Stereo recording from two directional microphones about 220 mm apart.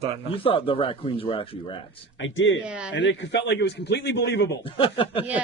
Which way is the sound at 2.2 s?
60° left (ahead or behind).